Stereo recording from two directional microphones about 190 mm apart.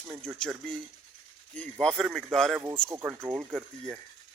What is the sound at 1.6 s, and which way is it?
Speech, 5° left (ahead or behind).